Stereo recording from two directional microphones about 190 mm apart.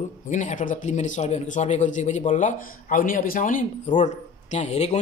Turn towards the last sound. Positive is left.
turn(degrees=35)  # may be behind; listen again after turning